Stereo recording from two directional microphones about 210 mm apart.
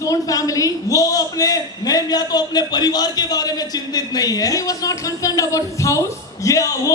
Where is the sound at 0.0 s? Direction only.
15° left (ahead or behind).